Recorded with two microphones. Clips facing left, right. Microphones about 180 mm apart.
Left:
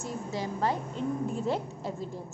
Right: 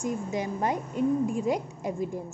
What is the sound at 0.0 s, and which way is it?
A woman's voice, 20° right (ahead or behind).